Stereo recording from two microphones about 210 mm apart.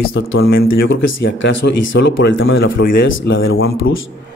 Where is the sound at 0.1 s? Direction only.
70° left (ahead or behind).